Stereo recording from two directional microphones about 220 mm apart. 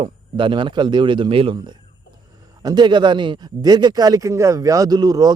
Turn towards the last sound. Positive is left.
turn(degrees=-15)  # may be behind; listen again after turning